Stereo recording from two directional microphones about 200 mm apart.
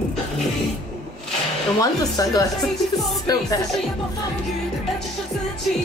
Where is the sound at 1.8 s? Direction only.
20° left (ahead or behind).